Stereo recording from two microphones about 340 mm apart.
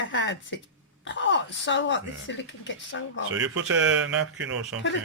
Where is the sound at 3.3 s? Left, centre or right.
Right.